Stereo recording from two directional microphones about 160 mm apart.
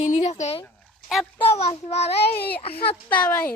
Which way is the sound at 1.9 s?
40° left (ahead or behind).